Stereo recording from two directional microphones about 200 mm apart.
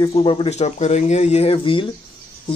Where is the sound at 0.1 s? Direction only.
25° left (ahead or behind).